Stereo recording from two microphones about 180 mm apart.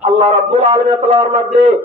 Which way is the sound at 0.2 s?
35° right (ahead or behind).